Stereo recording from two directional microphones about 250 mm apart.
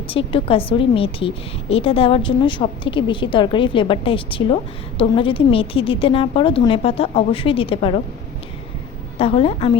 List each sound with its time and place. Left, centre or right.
0.1 s a woman's voice: left
9.1 s a woman's voice: left